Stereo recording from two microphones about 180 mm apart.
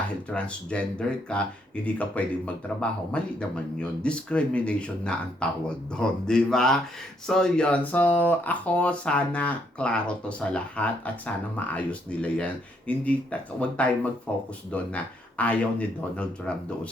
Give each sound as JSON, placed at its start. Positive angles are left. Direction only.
{"t": 0.3, "sound": "speech", "side_deg": 5}